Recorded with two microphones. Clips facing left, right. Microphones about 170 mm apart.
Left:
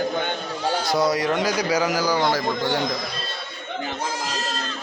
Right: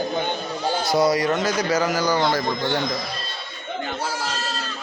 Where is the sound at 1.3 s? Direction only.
10° left (ahead or behind).